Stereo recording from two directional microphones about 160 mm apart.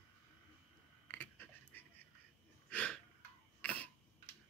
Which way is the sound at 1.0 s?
10° left (ahead or behind).